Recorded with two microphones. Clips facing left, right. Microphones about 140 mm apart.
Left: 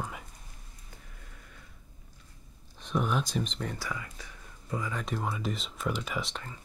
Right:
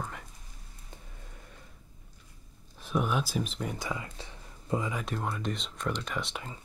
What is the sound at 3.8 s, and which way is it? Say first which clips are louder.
Speech: right 2 dB; 25° right (ahead or behind).